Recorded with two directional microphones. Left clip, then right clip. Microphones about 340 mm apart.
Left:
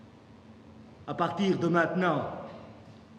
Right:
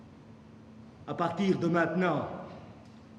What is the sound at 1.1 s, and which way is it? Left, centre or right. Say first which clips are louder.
Chuckle: left 1 dB; centre.